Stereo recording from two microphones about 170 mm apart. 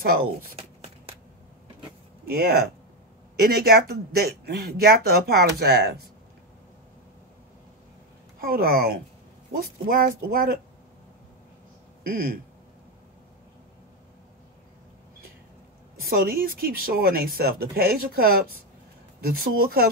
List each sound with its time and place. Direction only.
0.6 s a sound: 35° right (ahead or behind)
2.2 s speech: 65° right (ahead or behind)
8.4 s speech: 60° right (ahead or behind)
12.0 s speech: 60° right (ahead or behind)
16.1 s speech: 60° right (ahead or behind)